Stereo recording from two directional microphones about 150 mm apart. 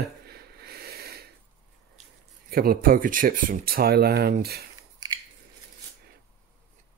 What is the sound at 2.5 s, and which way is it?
Speech, 85° right.